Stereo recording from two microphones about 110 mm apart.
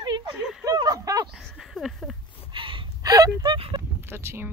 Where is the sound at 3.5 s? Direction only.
50° right (ahead or behind).